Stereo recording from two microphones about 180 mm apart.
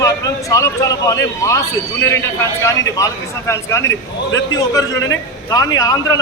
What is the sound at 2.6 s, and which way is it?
A man's voice, 20° left (ahead or behind).